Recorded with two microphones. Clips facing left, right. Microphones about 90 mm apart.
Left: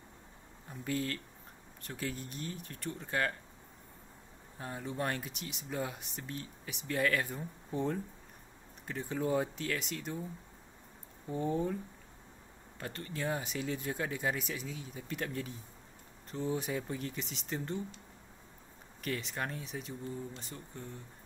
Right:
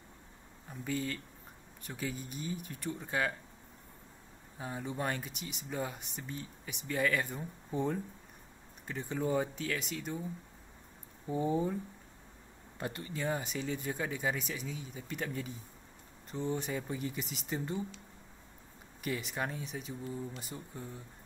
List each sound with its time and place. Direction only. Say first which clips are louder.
0.7 s speech: even; centre (ahead or behind)
4.6 s speech: even; 5° right (ahead or behind)
11.2 s speech: right 2 dB; 10° right (ahead or behind)
12.7 s speech: right 3 dB; 20° right (ahead or behind)
13.0 s speech: even; centre (ahead or behind)
19.0 s speech: right 1 dB; 5° right (ahead or behind)